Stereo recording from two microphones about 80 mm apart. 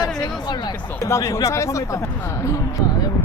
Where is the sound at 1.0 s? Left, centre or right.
Left.